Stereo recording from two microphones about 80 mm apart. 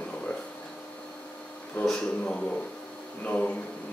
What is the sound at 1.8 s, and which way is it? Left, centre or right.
A man's voice, centre.